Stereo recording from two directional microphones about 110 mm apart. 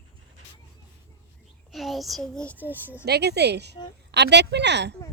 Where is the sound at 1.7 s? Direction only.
Centre (ahead or behind).